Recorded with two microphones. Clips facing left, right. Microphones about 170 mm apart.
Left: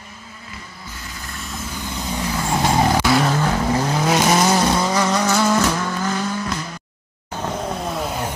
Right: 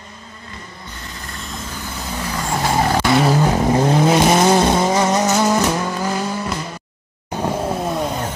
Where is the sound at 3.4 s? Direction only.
25° right (ahead or behind).